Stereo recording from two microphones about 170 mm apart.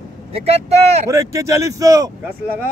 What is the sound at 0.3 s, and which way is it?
Speech, 35° right (ahead or behind).